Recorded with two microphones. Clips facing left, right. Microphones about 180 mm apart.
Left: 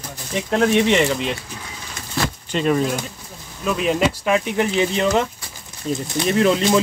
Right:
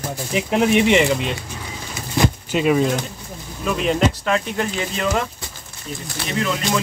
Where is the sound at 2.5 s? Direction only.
5° right (ahead or behind); by 5.3 s 20° left (ahead or behind).